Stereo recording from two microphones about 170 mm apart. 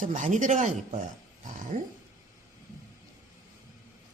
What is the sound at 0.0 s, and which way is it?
Speech, 50° right (ahead or behind).